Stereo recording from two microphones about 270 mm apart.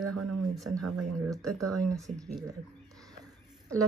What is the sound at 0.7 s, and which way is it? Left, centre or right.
Speech, right.